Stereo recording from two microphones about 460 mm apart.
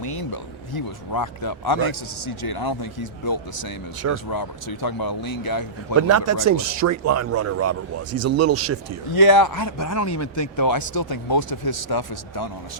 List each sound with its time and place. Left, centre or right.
0.0 s a sound: left
0.7 s speech: left
6.0 s speech: right
9.0 s speech: left